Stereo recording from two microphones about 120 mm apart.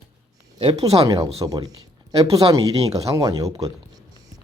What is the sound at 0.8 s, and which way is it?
Speech, 30° right (ahead or behind).